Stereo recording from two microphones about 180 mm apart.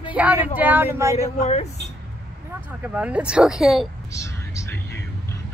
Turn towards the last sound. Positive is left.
turn(degrees=15)  # may be behind; listen again after turning